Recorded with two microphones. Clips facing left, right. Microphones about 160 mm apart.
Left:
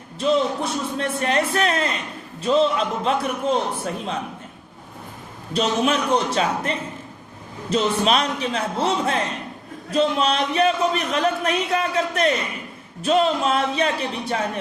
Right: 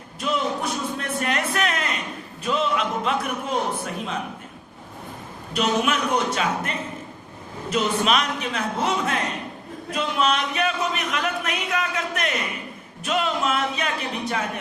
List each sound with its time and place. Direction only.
0.2 s speech: 30° left (ahead or behind)
5.5 s speech: 30° left (ahead or behind)